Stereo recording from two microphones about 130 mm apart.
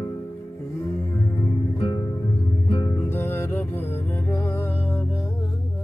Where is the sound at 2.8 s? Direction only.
15° left (ahead or behind).